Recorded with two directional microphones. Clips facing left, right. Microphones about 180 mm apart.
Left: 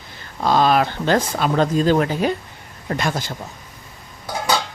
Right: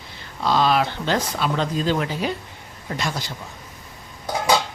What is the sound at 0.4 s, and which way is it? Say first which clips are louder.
Speech: left 3 dB; 50° left (ahead or behind).